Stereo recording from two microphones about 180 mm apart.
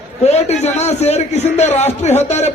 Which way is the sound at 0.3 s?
35° left (ahead or behind).